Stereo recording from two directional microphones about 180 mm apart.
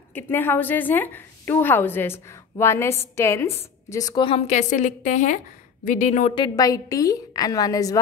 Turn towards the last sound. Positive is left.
turn(degrees=20)  # may be behind; listen again after turning